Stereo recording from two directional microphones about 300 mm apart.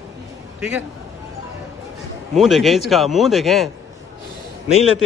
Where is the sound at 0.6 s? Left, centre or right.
Centre.